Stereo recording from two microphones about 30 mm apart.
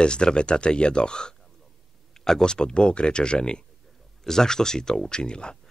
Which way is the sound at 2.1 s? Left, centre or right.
Centre.